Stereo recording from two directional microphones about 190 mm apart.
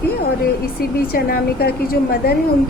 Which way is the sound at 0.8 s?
50° left (ahead or behind).